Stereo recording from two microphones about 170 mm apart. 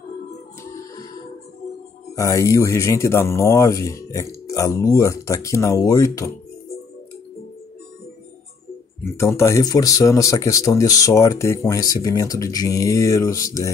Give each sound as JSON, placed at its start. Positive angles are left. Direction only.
{"t": 2.1, "sound": "speech", "side_deg": 20}
{"t": 9.1, "sound": "speech", "side_deg": 15}